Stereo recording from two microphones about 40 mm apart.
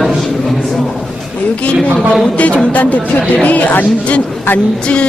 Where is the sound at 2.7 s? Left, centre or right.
Left.